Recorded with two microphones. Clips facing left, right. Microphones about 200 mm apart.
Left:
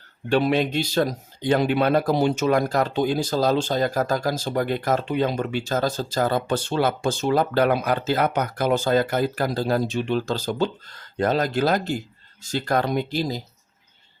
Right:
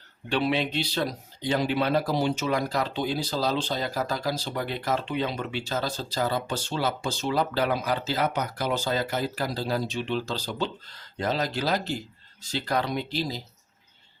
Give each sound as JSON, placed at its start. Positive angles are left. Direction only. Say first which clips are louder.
{"t": 0.3, "sound": "speech", "louder": "left 5 dB", "side_deg": 45}